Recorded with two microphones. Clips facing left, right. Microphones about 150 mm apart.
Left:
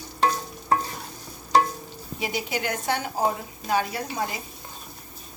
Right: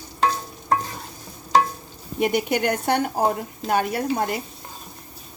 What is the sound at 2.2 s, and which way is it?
A woman's voice, 60° right (ahead or behind).